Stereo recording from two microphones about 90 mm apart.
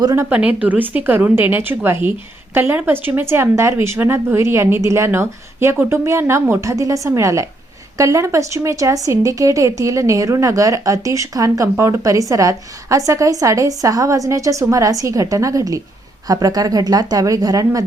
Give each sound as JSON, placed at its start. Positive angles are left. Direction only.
{"t": 0.2, "sound": "a woman's voice", "side_deg": -20}